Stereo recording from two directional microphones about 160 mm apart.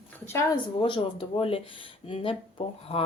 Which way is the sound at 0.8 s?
30° left (ahead or behind).